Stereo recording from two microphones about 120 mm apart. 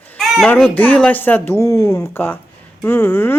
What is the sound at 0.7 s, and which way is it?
Speech, 15° left (ahead or behind).